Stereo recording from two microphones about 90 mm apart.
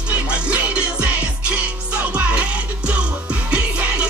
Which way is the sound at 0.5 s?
15° right (ahead or behind).